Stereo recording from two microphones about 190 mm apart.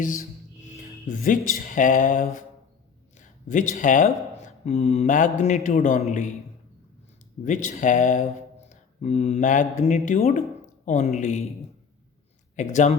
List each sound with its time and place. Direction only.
0.6 s speech: 40° left (ahead or behind)
7.4 s speech: 40° left (ahead or behind)
12.5 s speech: 40° left (ahead or behind)